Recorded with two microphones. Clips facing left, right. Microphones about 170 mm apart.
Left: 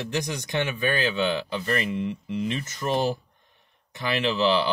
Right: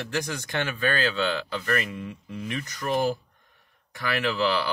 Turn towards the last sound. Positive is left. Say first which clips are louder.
# left 3 dB
turn(degrees=20)  # may be behind; listen again after turning